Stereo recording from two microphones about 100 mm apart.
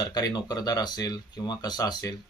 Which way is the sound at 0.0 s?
40° left (ahead or behind).